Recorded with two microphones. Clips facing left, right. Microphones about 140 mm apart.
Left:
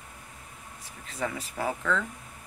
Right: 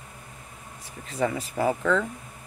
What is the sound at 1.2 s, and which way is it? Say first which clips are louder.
Speech: right 6 dB; 30° right (ahead or behind).